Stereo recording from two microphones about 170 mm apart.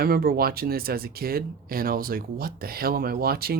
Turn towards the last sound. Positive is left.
turn(degrees=-65)  # may be behind; listen again after turning